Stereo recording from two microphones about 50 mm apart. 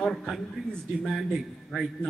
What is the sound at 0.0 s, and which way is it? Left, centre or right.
Speech, centre.